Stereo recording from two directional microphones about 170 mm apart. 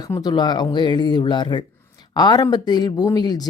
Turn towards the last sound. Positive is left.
turn(degrees=25)  # may be behind; listen again after turning